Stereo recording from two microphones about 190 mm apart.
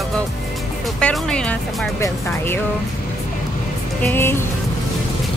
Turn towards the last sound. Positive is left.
turn(degrees=10)  # may be behind; listen again after turning